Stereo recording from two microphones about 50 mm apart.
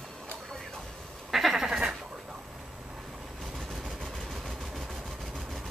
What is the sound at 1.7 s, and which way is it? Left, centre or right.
Sheep, right.